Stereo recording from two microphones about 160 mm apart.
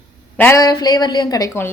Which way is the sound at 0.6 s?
25° left (ahead or behind).